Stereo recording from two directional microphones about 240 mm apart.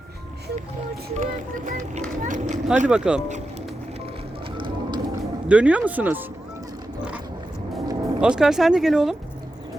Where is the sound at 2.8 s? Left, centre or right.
Centre.